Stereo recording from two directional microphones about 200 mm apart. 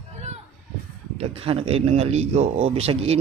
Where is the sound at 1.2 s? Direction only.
30° right (ahead or behind).